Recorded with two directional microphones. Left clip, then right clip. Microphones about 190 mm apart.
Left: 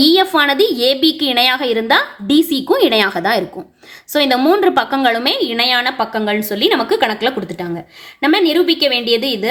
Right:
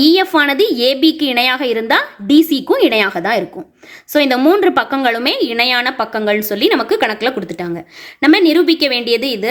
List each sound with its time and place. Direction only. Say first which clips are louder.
0.0 s a woman's voice: even; 20° right (ahead or behind)